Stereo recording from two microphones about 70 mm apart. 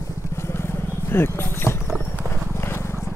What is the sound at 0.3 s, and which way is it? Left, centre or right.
Vehicle, left.